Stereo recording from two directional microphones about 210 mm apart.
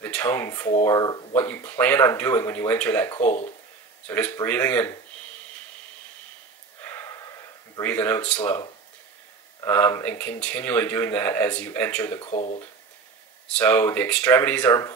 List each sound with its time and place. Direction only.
0.0 s speech: 10° left (ahead or behind)
3.2 s speech: 35° left (ahead or behind)
4.1 s speech: 10° left (ahead or behind)
6.8 s a sound: 10° left (ahead or behind)
7.7 s speech: 10° left (ahead or behind)
12.2 s speech: 30° left (ahead or behind)
13.5 s speech: 10° left (ahead or behind)